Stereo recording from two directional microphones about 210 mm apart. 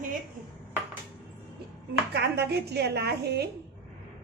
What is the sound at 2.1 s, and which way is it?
A woman's voice, 50° right (ahead or behind).